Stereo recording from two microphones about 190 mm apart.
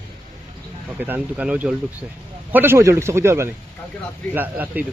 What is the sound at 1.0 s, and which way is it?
Speech, 10° right (ahead or behind).